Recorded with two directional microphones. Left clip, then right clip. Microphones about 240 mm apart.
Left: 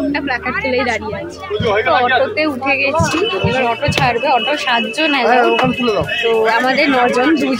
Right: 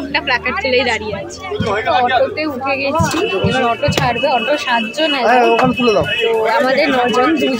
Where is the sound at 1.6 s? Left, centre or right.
Right.